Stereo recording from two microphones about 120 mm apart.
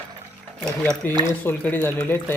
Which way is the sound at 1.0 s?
15° left (ahead or behind).